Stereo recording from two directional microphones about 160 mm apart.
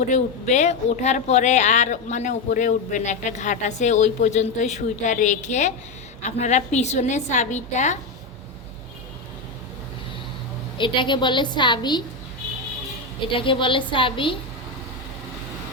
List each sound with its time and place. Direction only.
0.1 s speech: 45° left (ahead or behind)
10.8 s a woman's voice: 30° left (ahead or behind)
13.1 s a woman's voice: 30° left (ahead or behind)